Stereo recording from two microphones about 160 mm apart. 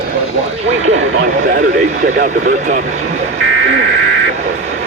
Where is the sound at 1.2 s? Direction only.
85° right; by 2.8 s 65° right (ahead or behind).